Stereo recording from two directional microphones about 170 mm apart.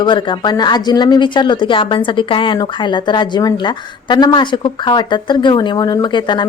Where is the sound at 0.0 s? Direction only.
30° left (ahead or behind).